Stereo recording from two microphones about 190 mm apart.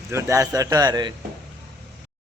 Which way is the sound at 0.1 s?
15° right (ahead or behind).